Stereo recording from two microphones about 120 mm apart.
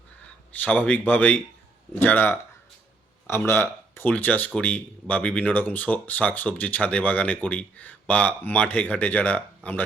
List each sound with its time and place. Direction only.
0.6 s speech: 15° left (ahead or behind)